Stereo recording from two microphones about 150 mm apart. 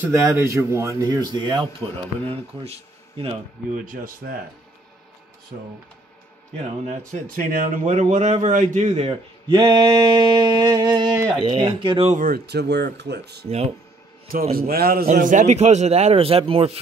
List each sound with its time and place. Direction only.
0.0 s a sound: 15° right (ahead or behind)
2.2 s speech: 40° right (ahead or behind)
3.7 s speech: 65° right (ahead or behind)
7.1 s a man's voice: 65° right (ahead or behind); by 9.1 s 50° right (ahead or behind)
9.5 s a sound: 25° right (ahead or behind)
11.3 s speech: 35° right (ahead or behind)
12.1 s speech: 70° right (ahead or behind); by 13.5 s 90° right
14.5 s a man's voice: 80° right; by 16.8 s 40° right (ahead or behind)